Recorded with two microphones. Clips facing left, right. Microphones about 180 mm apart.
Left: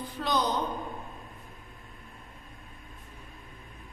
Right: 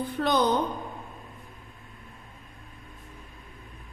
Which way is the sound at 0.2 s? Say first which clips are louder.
Right 4 dB; 60° right (ahead or behind).